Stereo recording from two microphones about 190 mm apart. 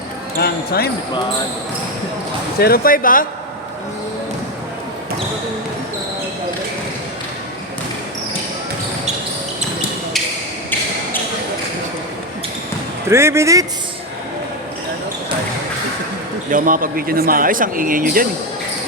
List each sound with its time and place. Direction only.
0.3 s speech: 55° left (ahead or behind)
2.6 s speech: 55° left (ahead or behind)
13.1 s speech: 15° right (ahead or behind)
16.5 s speech: 45° right (ahead or behind)